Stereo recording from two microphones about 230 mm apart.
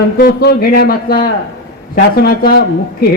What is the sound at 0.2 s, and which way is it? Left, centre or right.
A man's voice, left.